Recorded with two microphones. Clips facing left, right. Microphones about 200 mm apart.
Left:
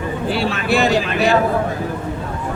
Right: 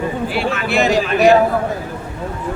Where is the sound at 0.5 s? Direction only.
35° left (ahead or behind).